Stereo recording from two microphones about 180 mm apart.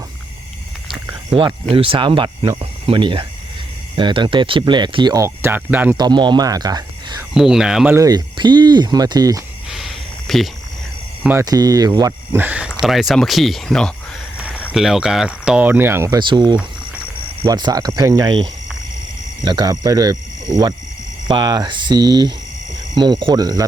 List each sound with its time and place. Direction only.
1.7 s speech: 30° right (ahead or behind); by 6.0 s 10° right (ahead or behind)
6.0 s speech: 25° right (ahead or behind)
7.3 s speech: 5° right (ahead or behind)
7.9 s speech: 20° right (ahead or behind)
9.6 s a sound: centre (ahead or behind)
11.2 s speech: 10° right (ahead or behind)
11.4 s speech: 20° right (ahead or behind)
17.4 s speech: 20° right (ahead or behind)
19.5 s speech: 20° right (ahead or behind)